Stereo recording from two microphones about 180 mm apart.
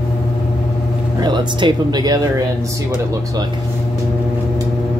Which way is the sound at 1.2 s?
25° right (ahead or behind).